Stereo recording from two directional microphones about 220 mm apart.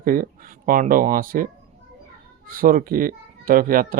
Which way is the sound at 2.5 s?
40° right (ahead or behind).